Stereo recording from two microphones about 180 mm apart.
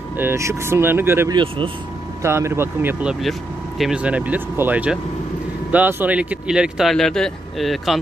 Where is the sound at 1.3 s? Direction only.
30° right (ahead or behind).